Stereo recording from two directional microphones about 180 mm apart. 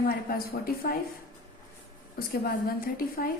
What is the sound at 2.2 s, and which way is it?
Speech, 55° left (ahead or behind).